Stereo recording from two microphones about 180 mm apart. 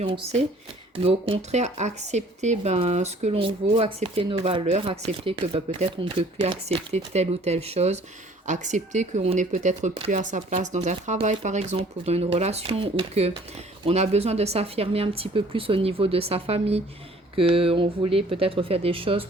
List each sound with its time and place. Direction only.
0.0 s speech: 35° right (ahead or behind)